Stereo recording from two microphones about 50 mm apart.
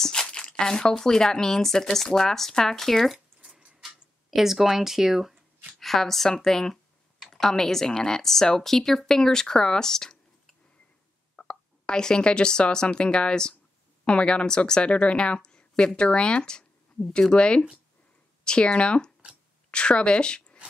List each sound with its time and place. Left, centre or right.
0.0 s speech: centre
3.8 s speech: centre
5.8 s a woman's voice: centre